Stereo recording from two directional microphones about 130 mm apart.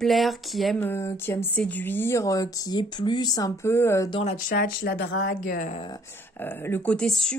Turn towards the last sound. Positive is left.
turn(degrees=5)  # may be behind; listen again after turning